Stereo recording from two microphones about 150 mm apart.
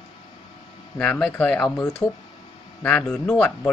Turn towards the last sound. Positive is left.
turn(degrees=5)  # may be behind; listen again after turning